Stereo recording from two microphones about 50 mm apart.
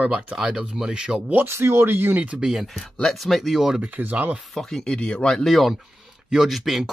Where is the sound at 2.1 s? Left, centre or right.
Right.